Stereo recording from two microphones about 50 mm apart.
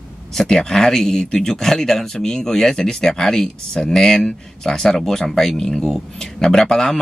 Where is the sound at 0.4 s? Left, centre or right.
Centre.